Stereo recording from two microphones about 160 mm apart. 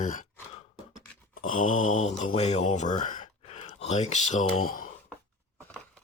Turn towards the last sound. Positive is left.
turn(degrees=55)  # may be behind; listen again after turning